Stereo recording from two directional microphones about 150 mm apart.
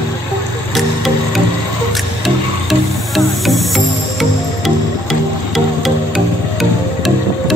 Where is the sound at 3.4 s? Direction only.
Centre (ahead or behind).